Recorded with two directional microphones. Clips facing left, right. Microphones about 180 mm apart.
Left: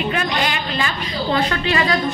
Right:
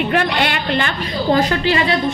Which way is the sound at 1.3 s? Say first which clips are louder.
Right 4 dB; 35° right (ahead or behind).